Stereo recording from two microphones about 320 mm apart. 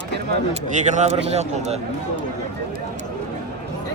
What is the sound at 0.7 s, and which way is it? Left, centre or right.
Speech, right.